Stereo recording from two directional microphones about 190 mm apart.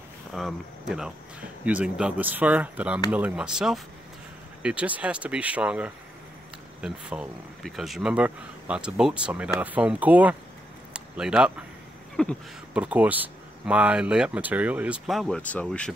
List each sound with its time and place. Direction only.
0.3 s speech: centre (ahead or behind)
10.9 s a sound: 5° right (ahead or behind)
12.2 s speech: 5° left (ahead or behind)
12.7 s speech: 5° right (ahead or behind)